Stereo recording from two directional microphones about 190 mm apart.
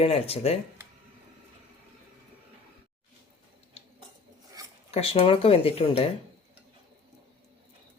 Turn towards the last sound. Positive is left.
turn(degrees=30)  # may be behind; listen again after turning